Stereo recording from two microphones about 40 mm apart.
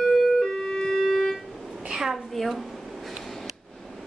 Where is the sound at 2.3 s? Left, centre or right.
Centre.